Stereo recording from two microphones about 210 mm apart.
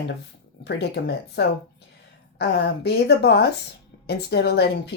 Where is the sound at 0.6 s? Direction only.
55° left (ahead or behind).